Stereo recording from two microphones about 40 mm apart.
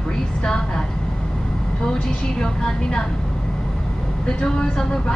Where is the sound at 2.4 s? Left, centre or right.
Centre.